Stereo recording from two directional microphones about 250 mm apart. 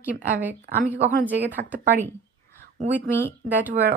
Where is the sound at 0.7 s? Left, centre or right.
Right.